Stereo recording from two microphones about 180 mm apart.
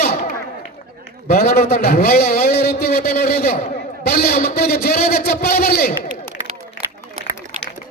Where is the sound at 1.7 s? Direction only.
60° left (ahead or behind).